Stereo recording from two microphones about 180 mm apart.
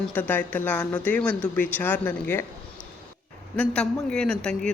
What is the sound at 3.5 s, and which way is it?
A man's voice, 5° left (ahead or behind).